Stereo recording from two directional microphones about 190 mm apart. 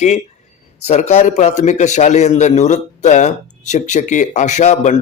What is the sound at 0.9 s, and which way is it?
A man's voice, 35° left (ahead or behind).